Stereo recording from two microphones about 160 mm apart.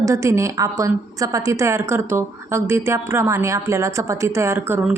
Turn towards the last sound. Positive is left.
turn(degrees=-15)  # may be behind; listen again after turning